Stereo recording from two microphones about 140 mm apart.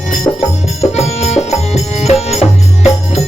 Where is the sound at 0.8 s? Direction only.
50° left (ahead or behind).